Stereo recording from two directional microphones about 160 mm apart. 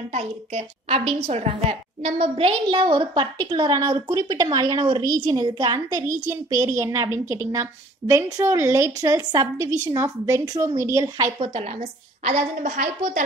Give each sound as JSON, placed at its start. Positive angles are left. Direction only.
{"t": 0.1, "sound": "a woman's voice", "side_deg": -45}
{"t": 11.3, "sound": "a woman's voice", "side_deg": -35}